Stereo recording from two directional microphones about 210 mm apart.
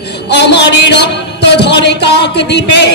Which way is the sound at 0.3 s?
55° left (ahead or behind).